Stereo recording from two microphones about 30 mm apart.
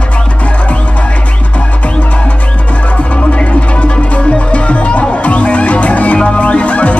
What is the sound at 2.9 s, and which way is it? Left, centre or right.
Music, left.